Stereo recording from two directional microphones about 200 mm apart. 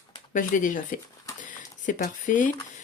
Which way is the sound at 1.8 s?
40° left (ahead or behind).